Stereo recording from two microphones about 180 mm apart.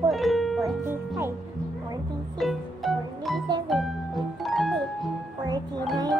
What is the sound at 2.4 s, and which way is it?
Music, centre (ahead or behind).